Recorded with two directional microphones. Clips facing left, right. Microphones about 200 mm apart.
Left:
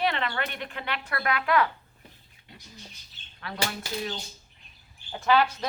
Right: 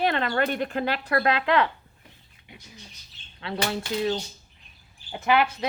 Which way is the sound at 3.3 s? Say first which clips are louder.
Right 6 dB; 25° right (ahead or behind).